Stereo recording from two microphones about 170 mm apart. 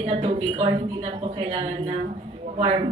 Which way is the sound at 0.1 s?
35° right (ahead or behind).